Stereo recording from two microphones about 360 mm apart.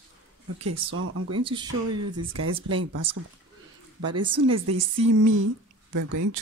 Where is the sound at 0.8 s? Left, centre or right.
Right.